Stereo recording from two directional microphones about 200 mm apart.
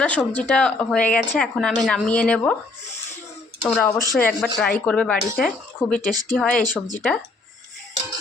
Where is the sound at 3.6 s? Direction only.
5° left (ahead or behind).